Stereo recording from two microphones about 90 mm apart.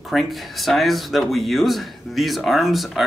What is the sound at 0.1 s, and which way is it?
Speech, centre (ahead or behind).